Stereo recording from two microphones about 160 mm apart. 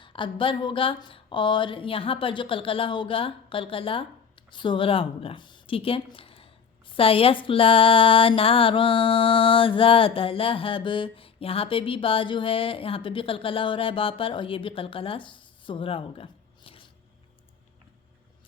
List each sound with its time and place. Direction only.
0.0 s speech: 30° left (ahead or behind)